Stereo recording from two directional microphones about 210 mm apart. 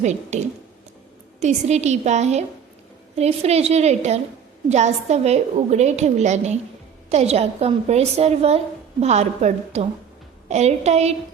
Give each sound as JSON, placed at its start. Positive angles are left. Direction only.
{"t": 0.0, "sound": "a woman's voice", "side_deg": -35}